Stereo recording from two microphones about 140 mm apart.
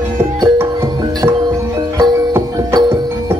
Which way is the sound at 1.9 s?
25° right (ahead or behind).